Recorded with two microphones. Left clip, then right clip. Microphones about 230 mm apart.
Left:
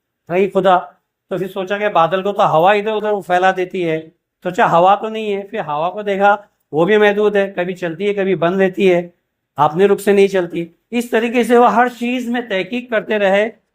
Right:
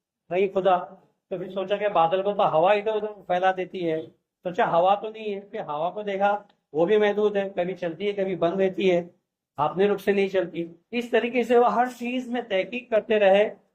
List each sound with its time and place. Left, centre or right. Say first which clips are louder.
0.3 s speech: left 9 dB; left